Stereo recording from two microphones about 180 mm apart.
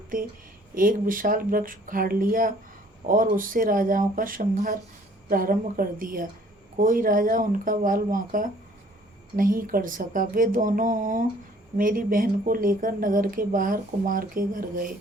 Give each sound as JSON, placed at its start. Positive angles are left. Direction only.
{"t": 0.7, "sound": "speech", "side_deg": -50}